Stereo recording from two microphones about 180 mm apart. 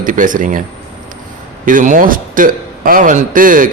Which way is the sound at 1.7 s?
50° right (ahead or behind).